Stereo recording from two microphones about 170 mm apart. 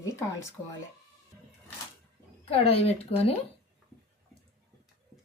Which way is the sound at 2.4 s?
35° left (ahead or behind).